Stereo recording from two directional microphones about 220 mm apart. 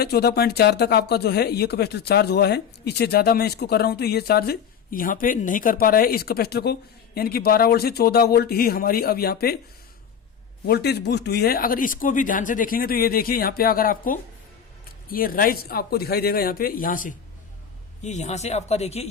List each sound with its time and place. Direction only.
0.0 s speech: 45° left (ahead or behind)
10.7 s speech: 50° left (ahead or behind); by 19.0 s 30° left (ahead or behind)